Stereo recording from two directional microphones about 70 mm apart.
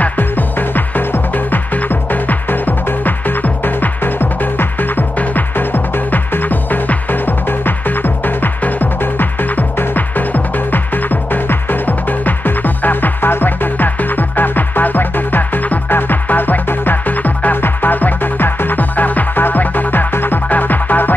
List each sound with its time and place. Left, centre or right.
0.0 s music: left